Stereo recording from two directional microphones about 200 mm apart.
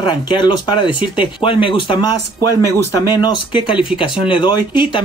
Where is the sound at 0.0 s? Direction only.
20° left (ahead or behind).